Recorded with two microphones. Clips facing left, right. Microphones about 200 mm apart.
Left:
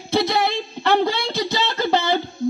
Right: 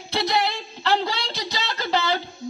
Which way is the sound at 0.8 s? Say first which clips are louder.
Left 5 dB; 55° left (ahead or behind).